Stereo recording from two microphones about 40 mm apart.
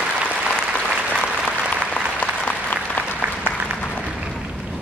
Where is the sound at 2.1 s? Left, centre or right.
Left.